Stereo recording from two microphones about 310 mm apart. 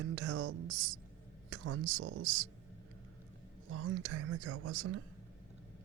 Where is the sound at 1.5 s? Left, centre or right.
Right.